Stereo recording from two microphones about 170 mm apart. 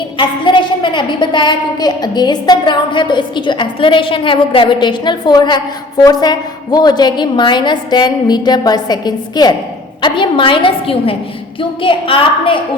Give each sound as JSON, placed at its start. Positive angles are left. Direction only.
{"t": 0.2, "sound": "a woman's voice", "side_deg": 30}